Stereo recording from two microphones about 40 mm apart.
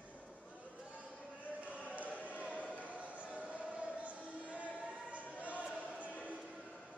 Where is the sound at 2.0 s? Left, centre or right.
Left.